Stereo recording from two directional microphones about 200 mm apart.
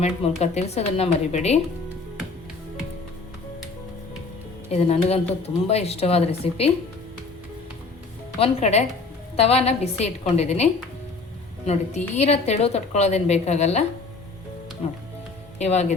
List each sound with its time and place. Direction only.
0.0 s a woman's voice: 35° left (ahead or behind)
4.7 s a woman's voice: 30° left (ahead or behind)
8.4 s a woman's voice: 35° left (ahead or behind)